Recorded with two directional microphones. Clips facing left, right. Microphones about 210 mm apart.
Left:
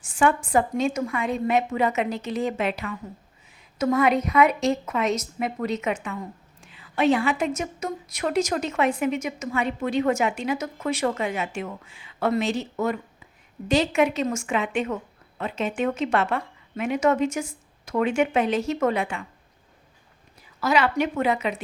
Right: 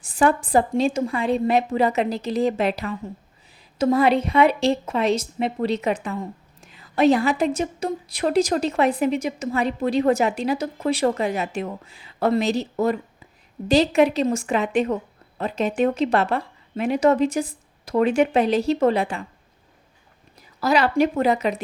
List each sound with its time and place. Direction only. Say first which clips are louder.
0.0 s a woman's voice: right 2 dB; 35° right (ahead or behind)
20.6 s a woman's voice: right 3 dB; 35° right (ahead or behind)